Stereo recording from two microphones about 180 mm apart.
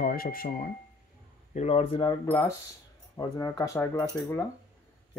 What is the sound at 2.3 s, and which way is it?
Speech, 15° left (ahead or behind).